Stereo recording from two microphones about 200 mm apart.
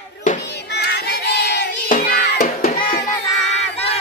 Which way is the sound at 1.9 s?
50° left (ahead or behind).